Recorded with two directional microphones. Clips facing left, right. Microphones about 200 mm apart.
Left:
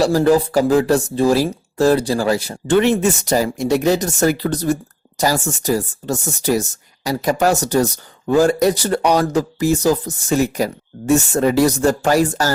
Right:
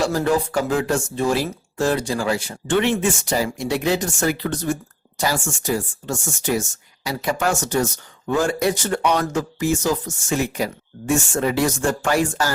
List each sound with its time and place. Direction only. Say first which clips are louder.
0.0 s speech: left 6 dB; 35° left (ahead or behind)